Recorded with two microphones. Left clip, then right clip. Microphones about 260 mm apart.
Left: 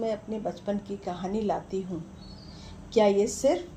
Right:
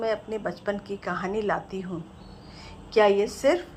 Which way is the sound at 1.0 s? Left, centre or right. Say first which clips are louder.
Right 4 dB; right.